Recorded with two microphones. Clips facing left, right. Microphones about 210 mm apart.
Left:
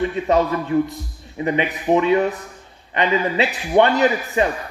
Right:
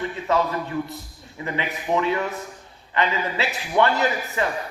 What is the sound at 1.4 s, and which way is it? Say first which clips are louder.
Speech: left 7 dB; 20° left (ahead or behind).